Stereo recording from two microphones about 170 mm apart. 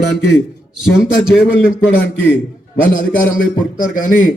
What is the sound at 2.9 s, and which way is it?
A man's voice, 50° left (ahead or behind).